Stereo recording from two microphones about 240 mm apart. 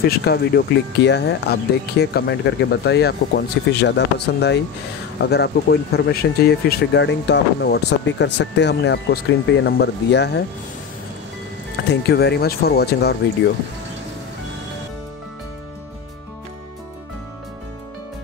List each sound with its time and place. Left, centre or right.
0.2 s speech: left
11.9 s speech: left